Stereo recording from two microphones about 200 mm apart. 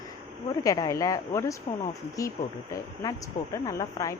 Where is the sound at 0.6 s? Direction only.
15° left (ahead or behind).